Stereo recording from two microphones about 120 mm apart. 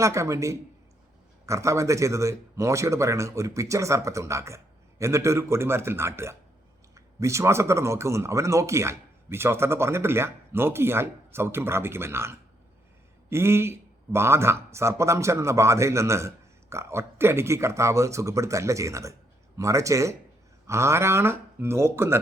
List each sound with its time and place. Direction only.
0.0 s speech: 25° right (ahead or behind)